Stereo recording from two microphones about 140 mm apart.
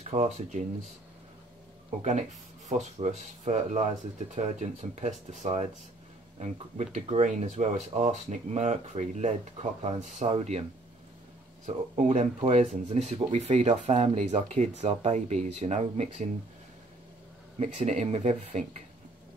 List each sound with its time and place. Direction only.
0.1 s speech: 55° right (ahead or behind)
1.9 s speech: 55° right (ahead or behind)
10.3 s speech: 45° right (ahead or behind)
11.6 s speech: 55° right (ahead or behind)
17.6 s speech: 50° right (ahead or behind)